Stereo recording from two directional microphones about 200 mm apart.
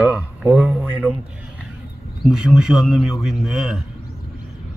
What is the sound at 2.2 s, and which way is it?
A man's voice, 5° right (ahead or behind).